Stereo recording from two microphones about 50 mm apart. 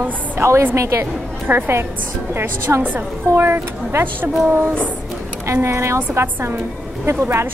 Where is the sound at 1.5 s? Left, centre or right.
Right.